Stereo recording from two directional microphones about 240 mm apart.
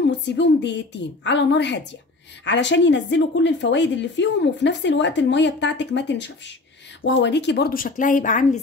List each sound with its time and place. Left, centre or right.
0.1 s a woman's voice: left